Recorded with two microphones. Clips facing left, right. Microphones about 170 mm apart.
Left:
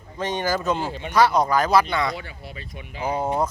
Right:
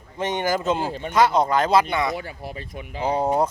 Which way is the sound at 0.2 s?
20° right (ahead or behind).